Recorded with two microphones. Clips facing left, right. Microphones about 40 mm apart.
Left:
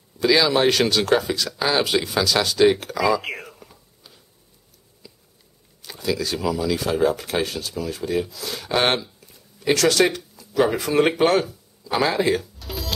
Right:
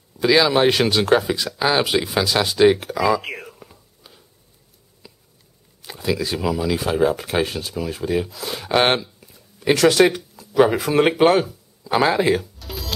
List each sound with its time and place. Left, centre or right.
0.2 s speech: centre
3.5 s whispering: centre
5.0 s a sound: right
5.8 s speech: centre
9.3 s a sound: centre
10.5 s speech: centre
12.5 s music: centre